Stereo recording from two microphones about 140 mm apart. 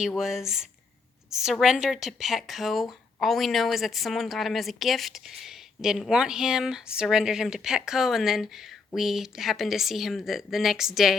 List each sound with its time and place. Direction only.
0.2 s a woman's voice: 5° right (ahead or behind)